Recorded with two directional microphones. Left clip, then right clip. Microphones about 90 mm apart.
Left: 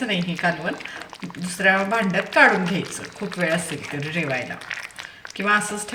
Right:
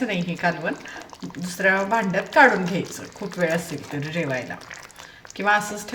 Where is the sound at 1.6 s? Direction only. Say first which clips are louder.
Left 1 dB; 35° right (ahead or behind).